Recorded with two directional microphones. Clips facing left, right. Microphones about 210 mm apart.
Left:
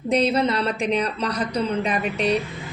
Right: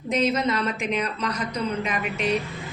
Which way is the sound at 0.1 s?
35° left (ahead or behind).